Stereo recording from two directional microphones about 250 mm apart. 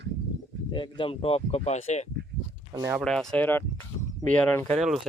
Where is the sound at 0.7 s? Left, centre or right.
Centre.